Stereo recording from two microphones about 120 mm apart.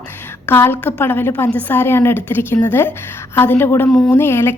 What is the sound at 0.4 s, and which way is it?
A woman's voice, 20° left (ahead or behind).